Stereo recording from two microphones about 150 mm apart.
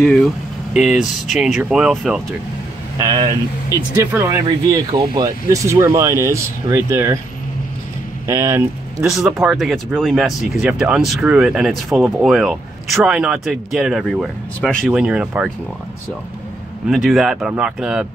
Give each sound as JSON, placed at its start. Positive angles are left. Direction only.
{"t": 0.0, "sound": "speech", "side_deg": 0}
{"t": 1.3, "sound": "speech", "side_deg": 0}
{"t": 3.0, "sound": "speech", "side_deg": -25}
{"t": 8.3, "sound": "speech", "side_deg": -20}
{"t": 9.0, "sound": "speech", "side_deg": 0}
{"t": 14.9, "sound": "speech", "side_deg": -5}
{"t": 16.9, "sound": "speech", "side_deg": 0}